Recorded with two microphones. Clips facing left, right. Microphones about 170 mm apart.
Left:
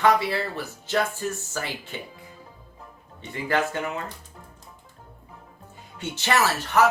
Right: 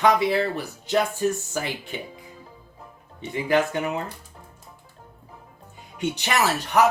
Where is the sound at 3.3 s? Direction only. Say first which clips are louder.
Right 4 dB; 15° right (ahead or behind).